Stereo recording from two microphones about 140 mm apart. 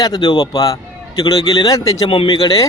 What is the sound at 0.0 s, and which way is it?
A man's voice, 30° left (ahead or behind).